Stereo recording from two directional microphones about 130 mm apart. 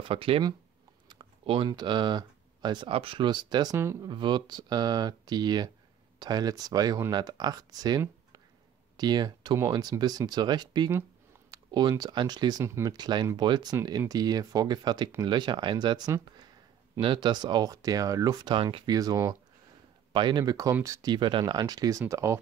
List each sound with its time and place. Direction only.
0.0 s speech: 45° right (ahead or behind)
1.0 s typing: 40° right (ahead or behind)
1.7 s speech: 35° right (ahead or behind)
3.7 s speech: 20° right (ahead or behind)
4.1 s speech: 35° right (ahead or behind)
11.5 s a sound: 35° right (ahead or behind)
12.0 s speech: 35° right (ahead or behind)
12.6 s speech: 20° right (ahead or behind)
12.9 s speech: 35° right (ahead or behind)
18.9 s speech: 25° right (ahead or behind)
20.1 s speech: 35° right (ahead or behind)